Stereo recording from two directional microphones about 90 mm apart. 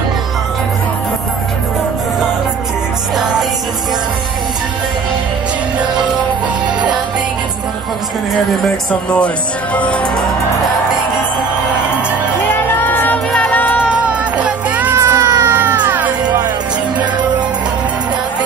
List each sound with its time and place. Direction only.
9.8 s music: 15° left (ahead or behind)
12.7 s music: 20° left (ahead or behind)
14.4 s music: 15° right (ahead or behind)
15.0 s music: 35° right (ahead or behind)